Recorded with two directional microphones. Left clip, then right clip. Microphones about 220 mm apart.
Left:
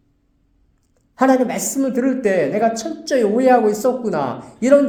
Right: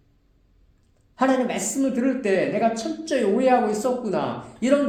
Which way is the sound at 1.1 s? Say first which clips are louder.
Left 6 dB; 40° left (ahead or behind).